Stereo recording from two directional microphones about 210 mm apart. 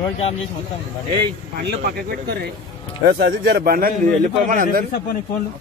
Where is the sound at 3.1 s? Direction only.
50° right (ahead or behind).